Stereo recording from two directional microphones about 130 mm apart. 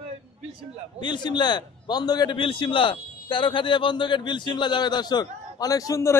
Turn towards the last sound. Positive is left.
turn(degrees=25)  # may be behind; listen again after turning